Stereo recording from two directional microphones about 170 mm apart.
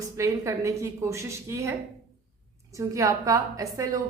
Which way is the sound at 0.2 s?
20° right (ahead or behind).